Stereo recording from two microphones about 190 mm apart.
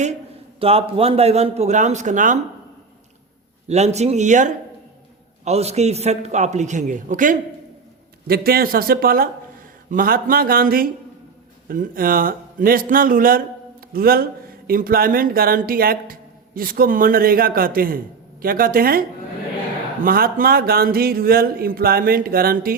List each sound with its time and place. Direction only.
0.6 s a man's voice: 30° right (ahead or behind)
3.7 s a man's voice: 35° right (ahead or behind)
8.3 s speech: 55° right (ahead or behind)